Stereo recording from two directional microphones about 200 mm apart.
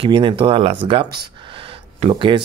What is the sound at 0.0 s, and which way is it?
Speech, 25° right (ahead or behind).